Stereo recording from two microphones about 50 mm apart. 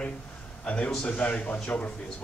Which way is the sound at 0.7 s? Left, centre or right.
Left.